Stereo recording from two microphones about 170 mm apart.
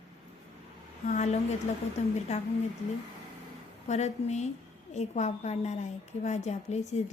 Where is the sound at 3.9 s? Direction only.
40° left (ahead or behind).